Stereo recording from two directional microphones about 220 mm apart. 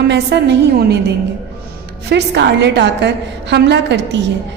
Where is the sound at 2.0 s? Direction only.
50° right (ahead or behind).